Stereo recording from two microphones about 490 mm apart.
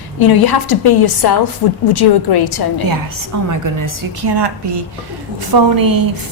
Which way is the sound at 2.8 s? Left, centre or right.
Right.